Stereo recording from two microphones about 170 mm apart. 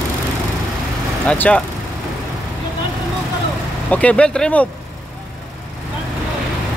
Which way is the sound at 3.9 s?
5° left (ahead or behind).